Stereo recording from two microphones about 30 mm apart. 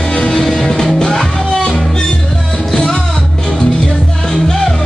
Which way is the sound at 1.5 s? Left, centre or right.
Left.